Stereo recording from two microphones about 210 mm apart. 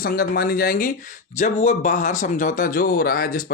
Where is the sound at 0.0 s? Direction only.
45° left (ahead or behind).